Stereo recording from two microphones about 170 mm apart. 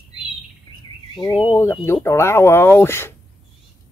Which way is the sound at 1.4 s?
15° left (ahead or behind).